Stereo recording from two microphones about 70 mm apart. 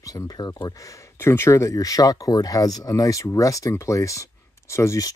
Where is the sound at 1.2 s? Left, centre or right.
Left.